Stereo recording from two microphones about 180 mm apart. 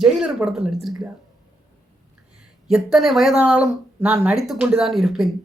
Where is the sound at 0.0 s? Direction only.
5° right (ahead or behind).